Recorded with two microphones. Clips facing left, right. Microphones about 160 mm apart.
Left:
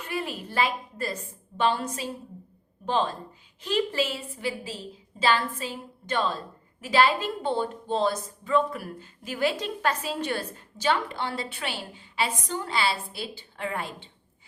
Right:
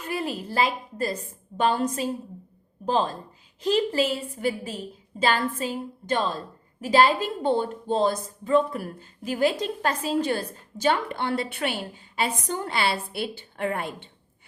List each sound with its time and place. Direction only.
0.1 s a woman's voice: 40° right (ahead or behind)